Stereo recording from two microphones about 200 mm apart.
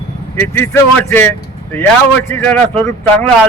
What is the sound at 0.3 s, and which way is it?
Speech, 10° left (ahead or behind).